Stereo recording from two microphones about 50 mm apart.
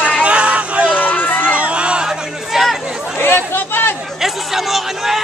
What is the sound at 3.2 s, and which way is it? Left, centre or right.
Chatter, left.